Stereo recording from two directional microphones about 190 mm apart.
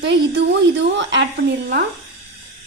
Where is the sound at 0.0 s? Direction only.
70° right (ahead or behind).